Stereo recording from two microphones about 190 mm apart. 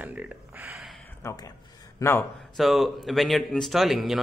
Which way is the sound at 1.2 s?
20° left (ahead or behind).